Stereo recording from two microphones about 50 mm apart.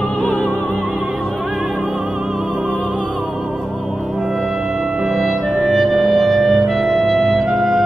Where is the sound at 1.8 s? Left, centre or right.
Right.